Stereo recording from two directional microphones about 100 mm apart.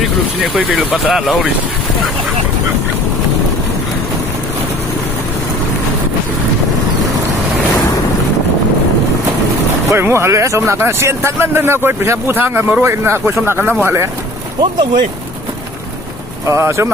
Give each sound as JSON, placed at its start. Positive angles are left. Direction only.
{"t": 0.4, "sound": "speech", "side_deg": -10}
{"t": 9.9, "sound": "speech", "side_deg": -25}
{"t": 14.6, "sound": "speech", "side_deg": -50}
{"t": 16.5, "sound": "speech", "side_deg": -30}